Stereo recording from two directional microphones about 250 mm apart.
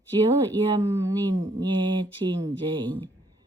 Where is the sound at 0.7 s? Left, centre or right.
Centre.